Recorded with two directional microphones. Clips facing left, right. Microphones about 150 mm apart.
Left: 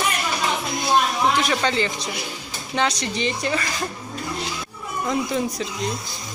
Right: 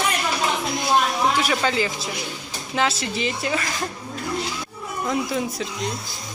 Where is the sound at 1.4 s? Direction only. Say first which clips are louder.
Even; 5° right (ahead or behind).